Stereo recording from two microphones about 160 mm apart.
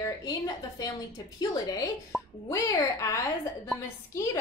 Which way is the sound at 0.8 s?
25° left (ahead or behind).